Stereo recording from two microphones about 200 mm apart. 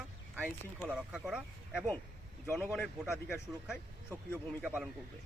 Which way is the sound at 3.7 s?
5° right (ahead or behind).